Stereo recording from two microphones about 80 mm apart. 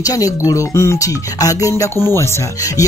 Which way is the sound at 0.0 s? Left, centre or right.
Left.